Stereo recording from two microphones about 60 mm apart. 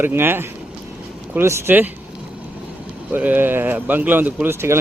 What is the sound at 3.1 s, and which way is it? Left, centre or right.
A man's voice, right.